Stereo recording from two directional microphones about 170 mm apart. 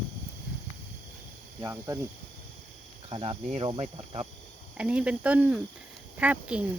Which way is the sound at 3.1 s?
30° right (ahead or behind).